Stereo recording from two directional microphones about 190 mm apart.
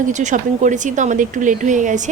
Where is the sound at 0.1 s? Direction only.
40° right (ahead or behind).